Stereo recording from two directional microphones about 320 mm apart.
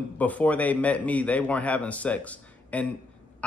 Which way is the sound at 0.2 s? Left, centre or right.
Centre.